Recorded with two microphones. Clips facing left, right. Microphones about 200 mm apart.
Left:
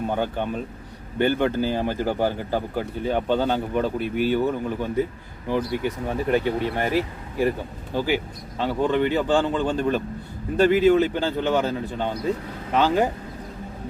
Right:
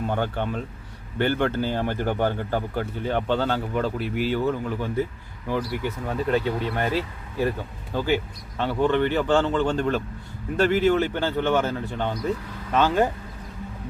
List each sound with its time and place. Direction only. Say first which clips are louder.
0.1 s speech: left 1 dB; 15° left (ahead or behind)